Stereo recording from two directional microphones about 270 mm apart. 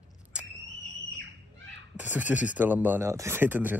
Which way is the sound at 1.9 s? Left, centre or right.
Centre.